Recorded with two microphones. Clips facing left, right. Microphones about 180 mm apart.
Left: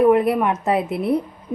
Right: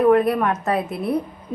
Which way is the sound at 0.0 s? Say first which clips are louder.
Left 1 dB; 20° left (ahead or behind).